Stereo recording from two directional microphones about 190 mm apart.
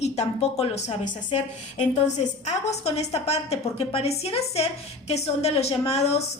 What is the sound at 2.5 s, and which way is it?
A woman's voice, 35° left (ahead or behind).